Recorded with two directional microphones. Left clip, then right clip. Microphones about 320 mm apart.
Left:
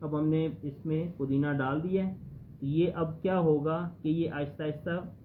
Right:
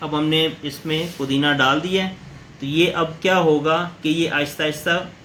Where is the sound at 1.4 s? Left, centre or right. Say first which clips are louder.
Right 16 dB; centre.